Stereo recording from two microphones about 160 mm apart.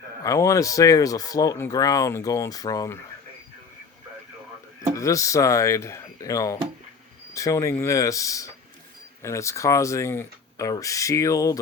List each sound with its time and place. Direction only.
0.2 s speech: 20° left (ahead or behind)
4.9 s speech: 20° left (ahead or behind)